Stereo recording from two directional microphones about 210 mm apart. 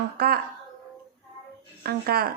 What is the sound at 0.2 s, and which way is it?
Speech, 50° right (ahead or behind).